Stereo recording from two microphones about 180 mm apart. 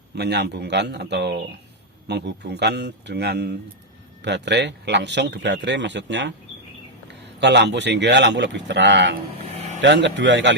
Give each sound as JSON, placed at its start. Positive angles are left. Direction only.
{"t": 0.2, "sound": "a man's voice", "side_deg": -70}